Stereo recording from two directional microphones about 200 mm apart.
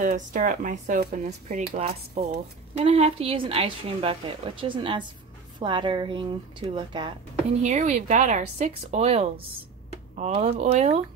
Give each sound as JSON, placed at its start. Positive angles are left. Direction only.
{"t": 0.0, "sound": "a woman's voice", "side_deg": -40}
{"t": 7.6, "sound": "speech", "side_deg": -35}